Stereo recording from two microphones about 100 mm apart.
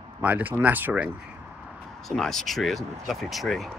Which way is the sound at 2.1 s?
5° left (ahead or behind).